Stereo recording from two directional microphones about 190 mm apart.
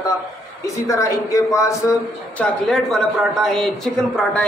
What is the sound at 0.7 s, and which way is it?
A man's voice, 15° left (ahead or behind).